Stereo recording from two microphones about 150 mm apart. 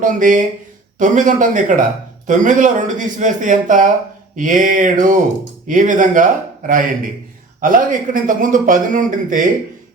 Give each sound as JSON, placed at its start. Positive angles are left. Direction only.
{"t": 0.0, "sound": "speech", "side_deg": -60}